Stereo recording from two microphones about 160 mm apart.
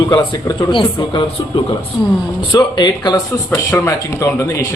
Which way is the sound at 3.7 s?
15° left (ahead or behind).